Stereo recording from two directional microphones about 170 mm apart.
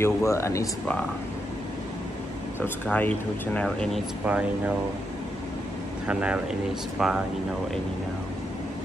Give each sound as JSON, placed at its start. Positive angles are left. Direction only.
{"t": 0.0, "sound": "speech", "side_deg": 15}
{"t": 2.6, "sound": "speech", "side_deg": 10}
{"t": 6.0, "sound": "speech", "side_deg": -5}